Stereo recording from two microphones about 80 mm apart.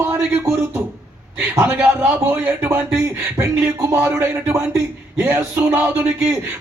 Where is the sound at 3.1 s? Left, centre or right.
Right.